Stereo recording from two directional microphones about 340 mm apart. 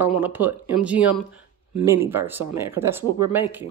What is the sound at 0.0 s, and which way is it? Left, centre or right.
Speech, centre.